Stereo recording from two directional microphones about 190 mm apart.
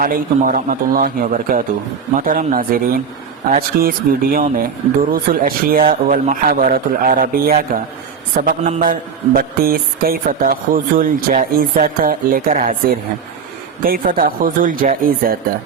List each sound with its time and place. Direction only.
0.0 s speech: 45° right (ahead or behind)
13.8 s speech: 50° right (ahead or behind)